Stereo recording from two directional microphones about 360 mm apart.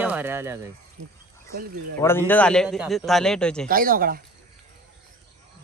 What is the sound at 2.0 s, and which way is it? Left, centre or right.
Speech, centre.